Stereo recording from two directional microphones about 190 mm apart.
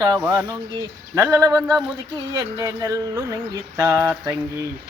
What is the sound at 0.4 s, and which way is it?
Speech, 20° right (ahead or behind).